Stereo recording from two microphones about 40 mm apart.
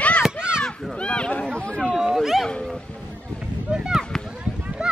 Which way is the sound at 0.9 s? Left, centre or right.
Left.